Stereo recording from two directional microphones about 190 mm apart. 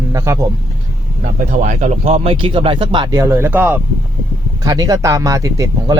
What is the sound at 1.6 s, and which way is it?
Speech, 40° right (ahead or behind).